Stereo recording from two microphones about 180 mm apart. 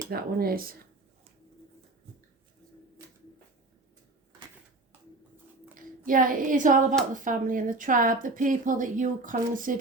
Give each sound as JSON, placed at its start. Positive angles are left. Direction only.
{"t": 0.1, "sound": "speech", "side_deg": -55}
{"t": 6.1, "sound": "speech", "side_deg": -50}